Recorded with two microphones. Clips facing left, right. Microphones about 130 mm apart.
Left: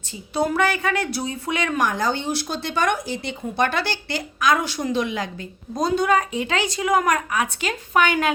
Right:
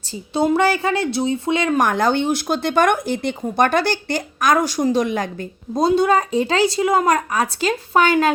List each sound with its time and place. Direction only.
0.3 s a woman's voice: 25° right (ahead or behind)
1.8 s speech: 60° right (ahead or behind)
5.7 s a woman's voice: 30° right (ahead or behind)